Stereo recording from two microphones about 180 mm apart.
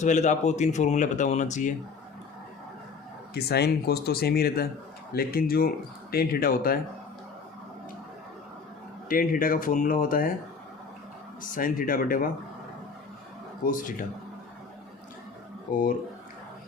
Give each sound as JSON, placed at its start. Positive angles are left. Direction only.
{"t": 0.0, "sound": "speech", "side_deg": 40}
{"t": 3.3, "sound": "speech", "side_deg": 65}
{"t": 9.0, "sound": "speech", "side_deg": 50}
{"t": 11.5, "sound": "speech", "side_deg": 50}
{"t": 13.6, "sound": "speech", "side_deg": 50}
{"t": 15.7, "sound": "speech", "side_deg": 50}